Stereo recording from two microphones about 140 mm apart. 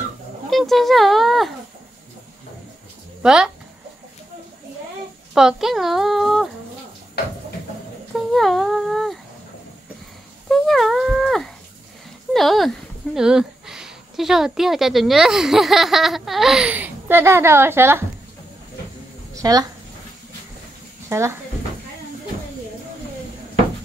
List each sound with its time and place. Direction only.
0.5 s speech: centre (ahead or behind)
3.2 s speech: 5° right (ahead or behind)
5.3 s speech: 5° right (ahead or behind)
8.3 s humming: centre (ahead or behind)
10.5 s a sound: centre (ahead or behind)
12.3 s speech: centre (ahead or behind); by 18.0 s 15° right (ahead or behind)
19.3 s a sound: 25° right (ahead or behind)